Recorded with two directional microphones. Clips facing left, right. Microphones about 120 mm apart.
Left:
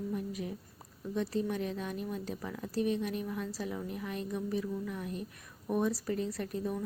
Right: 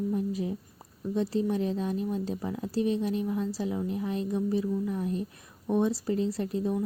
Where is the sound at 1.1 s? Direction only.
30° right (ahead or behind).